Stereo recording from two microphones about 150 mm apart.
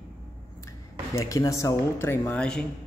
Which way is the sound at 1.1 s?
20° left (ahead or behind).